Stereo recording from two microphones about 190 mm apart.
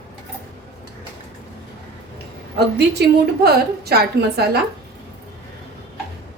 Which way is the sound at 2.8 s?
60° right (ahead or behind).